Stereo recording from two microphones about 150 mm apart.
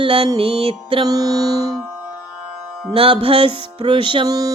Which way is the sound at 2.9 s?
40° right (ahead or behind).